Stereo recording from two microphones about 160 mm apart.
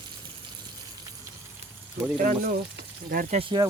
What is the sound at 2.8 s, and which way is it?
Speech, 65° right (ahead or behind).